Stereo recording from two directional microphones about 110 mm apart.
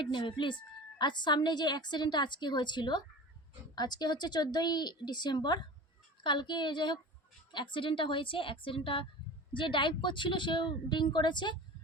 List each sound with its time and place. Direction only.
0.0 s a woman's voice: 45° left (ahead or behind)